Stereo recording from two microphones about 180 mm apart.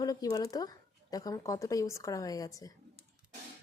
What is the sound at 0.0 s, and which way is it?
A woman's voice, 20° left (ahead or behind).